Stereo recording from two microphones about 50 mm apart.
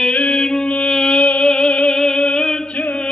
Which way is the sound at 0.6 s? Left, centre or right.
Left.